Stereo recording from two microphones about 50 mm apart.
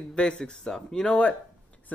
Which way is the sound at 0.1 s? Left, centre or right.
Centre.